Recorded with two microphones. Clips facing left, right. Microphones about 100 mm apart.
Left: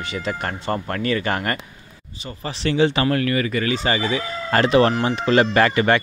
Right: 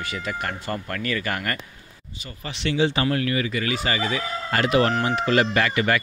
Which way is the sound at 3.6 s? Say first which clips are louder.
Left 4 dB; 35° left (ahead or behind).